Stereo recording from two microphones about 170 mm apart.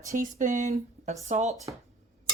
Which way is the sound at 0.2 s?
50° right (ahead or behind).